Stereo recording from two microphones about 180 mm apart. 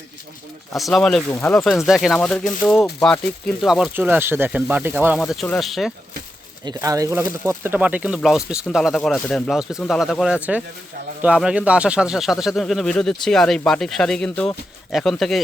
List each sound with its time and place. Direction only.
0.7 s speech: centre (ahead or behind)
5.2 s speech: centre (ahead or behind)
6.7 s speech: 20° right (ahead or behind); by 15.4 s centre (ahead or behind)